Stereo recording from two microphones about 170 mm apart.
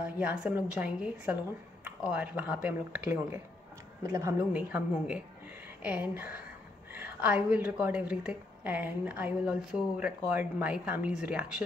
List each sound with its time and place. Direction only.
0.0 s a woman's voice: 5° right (ahead or behind)
4.6 s a woman's voice: 5° right (ahead or behind)